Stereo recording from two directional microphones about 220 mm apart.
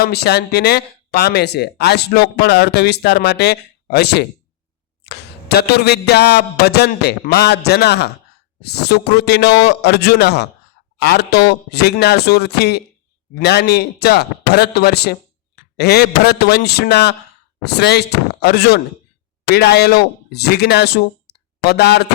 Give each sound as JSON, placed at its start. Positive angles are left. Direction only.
{"t": 0.0, "sound": "speech", "side_deg": 45}